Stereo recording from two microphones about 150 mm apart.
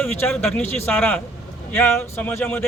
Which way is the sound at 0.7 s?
10° left (ahead or behind).